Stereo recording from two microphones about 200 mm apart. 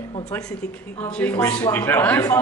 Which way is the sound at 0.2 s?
5° left (ahead or behind).